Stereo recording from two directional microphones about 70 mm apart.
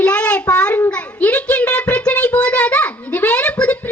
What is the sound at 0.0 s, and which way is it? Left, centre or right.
Child singing, centre.